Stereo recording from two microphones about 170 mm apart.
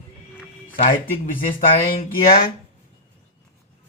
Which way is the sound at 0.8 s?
55° left (ahead or behind).